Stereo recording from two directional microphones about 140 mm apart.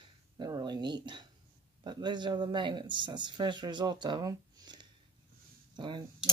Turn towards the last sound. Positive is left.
turn(degrees=-35)  # may be behind; listen again after turning